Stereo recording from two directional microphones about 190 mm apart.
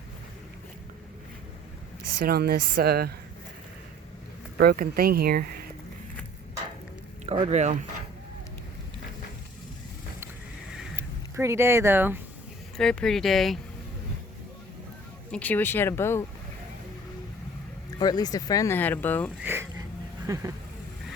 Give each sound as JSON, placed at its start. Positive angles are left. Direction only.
{"t": 2.1, "sound": "speech", "side_deg": -55}
{"t": 4.5, "sound": "speech", "side_deg": -55}
{"t": 7.3, "sound": "speech", "side_deg": -35}
{"t": 10.9, "sound": "speech", "side_deg": -15}
{"t": 12.7, "sound": "speech", "side_deg": 5}
{"t": 15.3, "sound": "speech", "side_deg": 10}
{"t": 18.0, "sound": "speech", "side_deg": 20}
{"t": 19.4, "sound": "speech", "side_deg": -10}